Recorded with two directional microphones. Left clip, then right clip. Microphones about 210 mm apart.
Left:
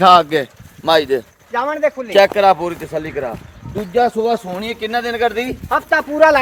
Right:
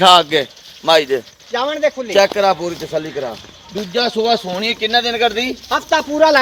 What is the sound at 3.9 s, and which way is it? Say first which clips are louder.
Speech: left 1 dB; 10° right (ahead or behind).